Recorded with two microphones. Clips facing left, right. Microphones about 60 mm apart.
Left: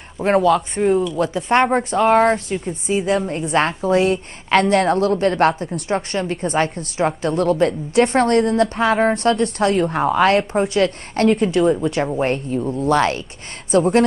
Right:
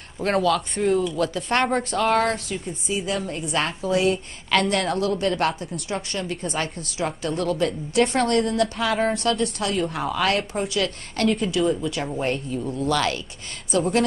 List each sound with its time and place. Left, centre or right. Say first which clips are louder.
0.2 s speech: left 6 dB; centre
0.6 s speech: left 4 dB; centre
1.1 s speech: left 6 dB; left
2.6 s a woman's voice: left 7 dB; left